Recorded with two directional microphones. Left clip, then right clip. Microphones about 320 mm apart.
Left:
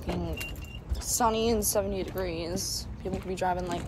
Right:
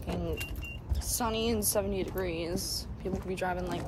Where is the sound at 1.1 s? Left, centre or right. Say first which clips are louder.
Left 5 dB; centre.